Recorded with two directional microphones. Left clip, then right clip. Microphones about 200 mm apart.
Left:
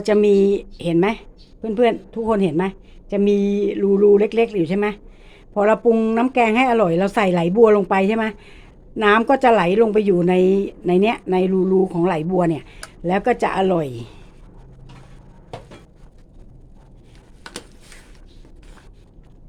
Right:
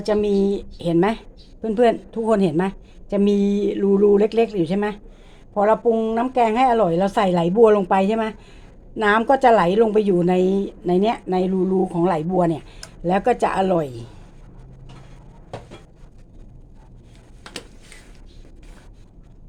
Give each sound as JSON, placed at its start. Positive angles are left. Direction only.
{"t": 0.0, "sound": "a woman's voice", "side_deg": 25}
{"t": 5.5, "sound": "a woman's voice", "side_deg": 25}